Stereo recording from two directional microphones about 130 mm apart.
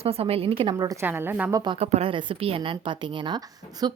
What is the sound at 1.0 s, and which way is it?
Speech, 15° right (ahead or behind).